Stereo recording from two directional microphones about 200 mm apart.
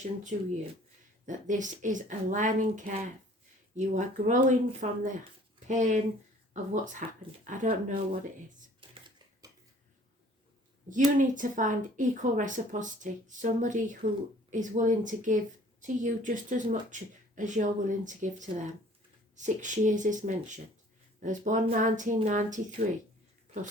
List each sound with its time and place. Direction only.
0.0 s speech: 35° right (ahead or behind)
8.8 s a sound: 25° right (ahead or behind)
11.2 s speech: 40° right (ahead or behind)